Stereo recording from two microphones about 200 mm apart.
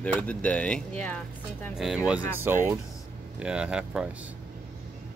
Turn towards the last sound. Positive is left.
turn(degrees=-5)  # may be behind; listen again after turning